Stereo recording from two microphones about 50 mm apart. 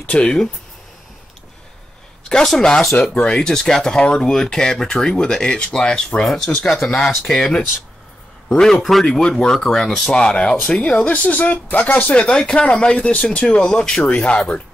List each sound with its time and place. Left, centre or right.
0.0 s speech: left
2.2 s speech: centre
3.0 s speech: left; by 10.1 s centre
10.1 s speech: centre; by 12.2 s left
12.2 s speech: centre